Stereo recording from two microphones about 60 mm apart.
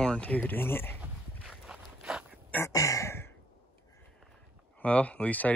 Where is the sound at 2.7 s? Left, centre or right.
Left.